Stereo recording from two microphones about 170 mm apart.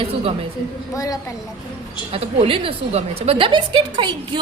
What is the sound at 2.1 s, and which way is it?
A woman's voice, 35° right (ahead or behind).